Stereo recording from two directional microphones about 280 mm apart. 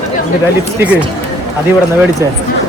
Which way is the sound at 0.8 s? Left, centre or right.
Centre.